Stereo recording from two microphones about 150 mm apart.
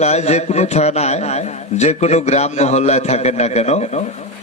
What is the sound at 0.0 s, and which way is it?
A man's voice, 45° left (ahead or behind).